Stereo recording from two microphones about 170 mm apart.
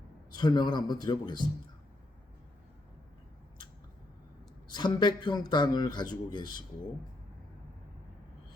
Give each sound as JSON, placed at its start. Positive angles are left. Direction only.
{"t": 0.3, "sound": "a man's voice", "side_deg": 25}
{"t": 4.7, "sound": "a man's voice", "side_deg": 25}